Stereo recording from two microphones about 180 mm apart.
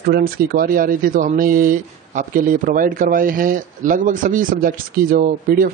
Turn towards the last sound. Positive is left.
turn(degrees=-50)  # may be behind; listen again after turning